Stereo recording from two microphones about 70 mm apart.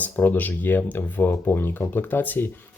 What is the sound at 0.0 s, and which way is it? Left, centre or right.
Speech, left.